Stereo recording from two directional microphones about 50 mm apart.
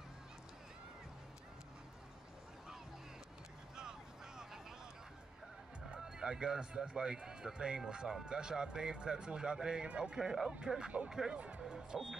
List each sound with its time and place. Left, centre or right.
5.9 s speech: centre
11.3 s speech: right
11.6 s music: centre